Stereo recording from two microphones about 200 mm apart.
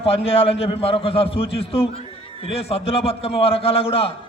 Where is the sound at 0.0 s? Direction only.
30° left (ahead or behind).